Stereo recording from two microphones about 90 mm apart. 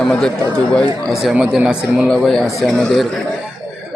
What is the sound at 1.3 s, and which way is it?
Speech, 10° right (ahead or behind).